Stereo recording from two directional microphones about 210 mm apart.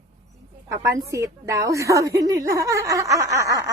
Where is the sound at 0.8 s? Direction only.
15° right (ahead or behind).